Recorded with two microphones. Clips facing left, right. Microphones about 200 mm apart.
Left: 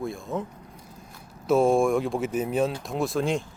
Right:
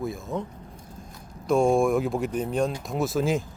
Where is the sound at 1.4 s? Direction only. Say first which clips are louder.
Even; 5° left (ahead or behind).